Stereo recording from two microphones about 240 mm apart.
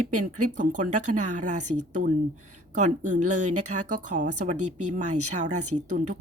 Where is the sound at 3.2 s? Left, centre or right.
Right.